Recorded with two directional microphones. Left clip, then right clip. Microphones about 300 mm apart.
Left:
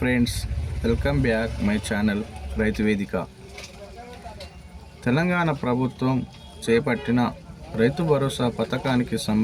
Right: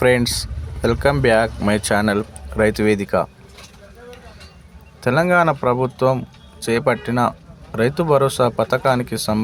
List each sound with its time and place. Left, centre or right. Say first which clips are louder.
0.0 s speech: right 9 dB; right
5.0 s speech: right 8 dB; centre